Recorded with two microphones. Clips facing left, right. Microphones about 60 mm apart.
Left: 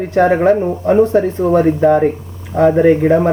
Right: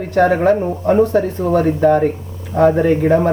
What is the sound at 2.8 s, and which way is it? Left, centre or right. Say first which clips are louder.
Speech: left 3 dB; left.